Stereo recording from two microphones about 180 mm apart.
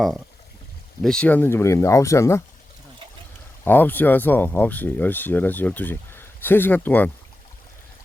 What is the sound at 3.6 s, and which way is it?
Speech, 10° left (ahead or behind).